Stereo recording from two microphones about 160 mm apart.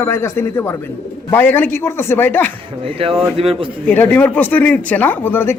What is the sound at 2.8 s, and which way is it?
Speech, 35° right (ahead or behind).